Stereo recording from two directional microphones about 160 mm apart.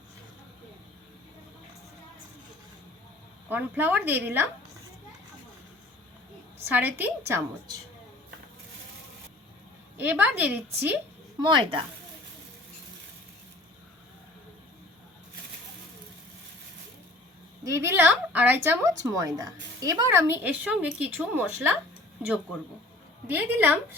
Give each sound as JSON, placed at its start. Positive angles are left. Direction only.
{"t": 3.5, "sound": "a woman's voice", "side_deg": -10}
{"t": 6.7, "sound": "a woman's voice", "side_deg": -15}
{"t": 10.0, "sound": "a woman's voice", "side_deg": -10}
{"t": 11.3, "sound": "a woman's voice", "side_deg": -30}
{"t": 17.6, "sound": "a woman's voice", "side_deg": -20}
{"t": 23.3, "sound": "a woman's voice", "side_deg": -10}